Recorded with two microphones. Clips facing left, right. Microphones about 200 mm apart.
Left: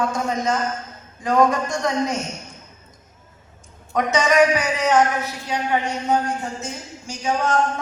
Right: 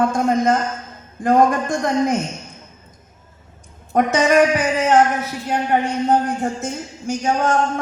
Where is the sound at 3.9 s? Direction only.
55° right (ahead or behind).